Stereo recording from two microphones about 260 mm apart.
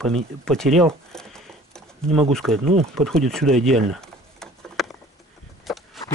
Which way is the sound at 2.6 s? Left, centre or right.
Right.